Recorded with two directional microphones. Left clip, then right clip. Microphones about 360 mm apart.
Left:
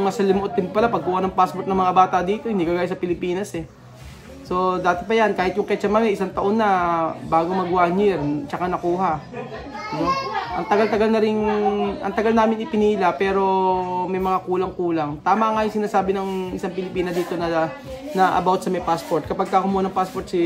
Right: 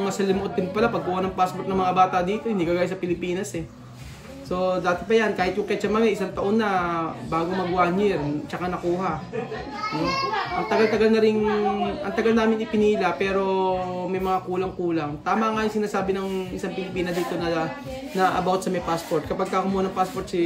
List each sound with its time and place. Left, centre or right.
0.0 s a woman's voice: centre
4.5 s a woman's voice: centre
10.7 s a woman's voice: centre